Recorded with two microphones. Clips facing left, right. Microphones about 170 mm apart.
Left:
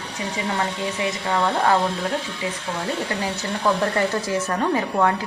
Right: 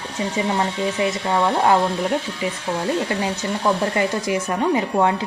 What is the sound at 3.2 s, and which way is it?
Speech, 20° right (ahead or behind).